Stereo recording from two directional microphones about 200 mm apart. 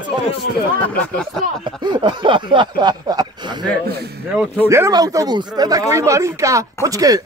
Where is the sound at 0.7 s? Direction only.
5° left (ahead or behind).